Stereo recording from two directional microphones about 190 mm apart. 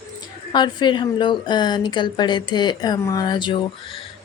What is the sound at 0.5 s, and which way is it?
A woman's voice, 25° left (ahead or behind).